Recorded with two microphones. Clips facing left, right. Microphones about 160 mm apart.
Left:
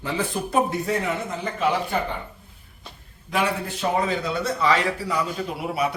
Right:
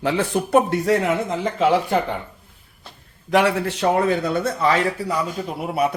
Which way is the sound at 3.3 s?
75° right (ahead or behind).